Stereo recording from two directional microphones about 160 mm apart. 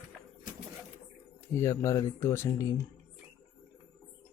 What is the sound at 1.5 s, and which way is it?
Speech, 20° left (ahead or behind).